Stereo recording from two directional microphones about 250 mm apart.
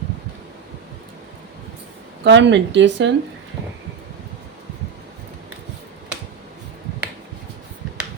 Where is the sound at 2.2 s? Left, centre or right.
Right.